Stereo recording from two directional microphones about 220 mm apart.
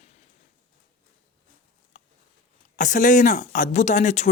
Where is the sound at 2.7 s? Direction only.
35° left (ahead or behind).